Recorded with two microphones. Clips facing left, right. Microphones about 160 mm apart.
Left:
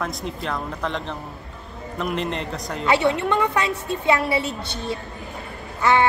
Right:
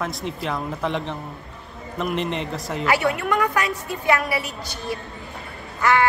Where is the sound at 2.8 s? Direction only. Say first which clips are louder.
Left 2 dB; 25° left (ahead or behind).